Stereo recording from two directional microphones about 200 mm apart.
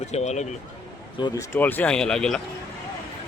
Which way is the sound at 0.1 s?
35° left (ahead or behind).